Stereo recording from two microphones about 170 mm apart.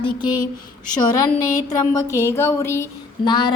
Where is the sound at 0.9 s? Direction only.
20° left (ahead or behind).